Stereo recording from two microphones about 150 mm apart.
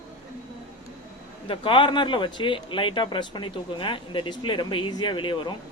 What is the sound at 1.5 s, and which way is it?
Speech, 35° left (ahead or behind).